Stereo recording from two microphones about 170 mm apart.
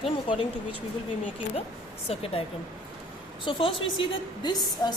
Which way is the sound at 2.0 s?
35° left (ahead or behind).